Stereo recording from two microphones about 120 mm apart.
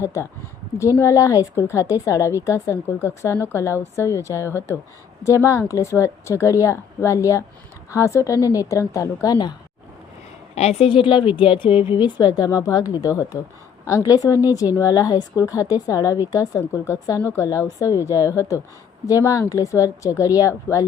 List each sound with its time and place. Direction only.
0.0 s a woman's voice: 25° left (ahead or behind)
10.5 s a woman's voice: 60° left (ahead or behind); by 20.8 s 25° left (ahead or behind)